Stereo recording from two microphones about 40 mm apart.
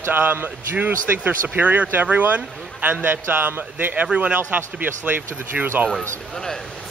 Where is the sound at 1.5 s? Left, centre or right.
Right.